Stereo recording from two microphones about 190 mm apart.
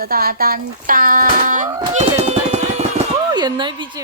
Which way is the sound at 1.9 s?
35° right (ahead or behind).